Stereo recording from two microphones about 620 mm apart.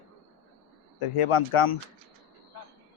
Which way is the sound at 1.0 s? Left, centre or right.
Left.